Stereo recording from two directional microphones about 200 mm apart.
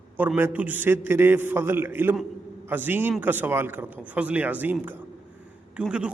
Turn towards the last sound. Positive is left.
turn(degrees=-5)  # may be behind; listen again after turning